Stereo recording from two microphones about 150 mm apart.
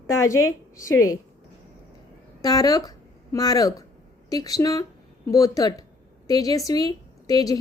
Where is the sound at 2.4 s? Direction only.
25° left (ahead or behind).